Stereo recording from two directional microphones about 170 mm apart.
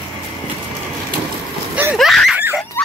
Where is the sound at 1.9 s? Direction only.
Centre (ahead or behind).